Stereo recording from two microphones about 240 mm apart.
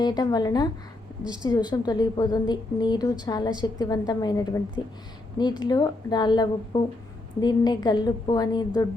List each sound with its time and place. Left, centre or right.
0.0 s a woman's voice: centre